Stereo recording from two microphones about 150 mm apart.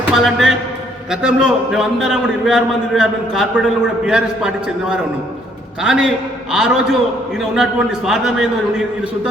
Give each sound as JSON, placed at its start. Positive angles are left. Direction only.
{"t": 0.1, "sound": "a man's voice", "side_deg": 0}